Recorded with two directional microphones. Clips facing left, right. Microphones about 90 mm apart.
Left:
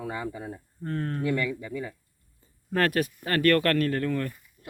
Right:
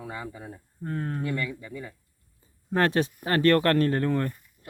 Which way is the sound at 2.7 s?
25° right (ahead or behind).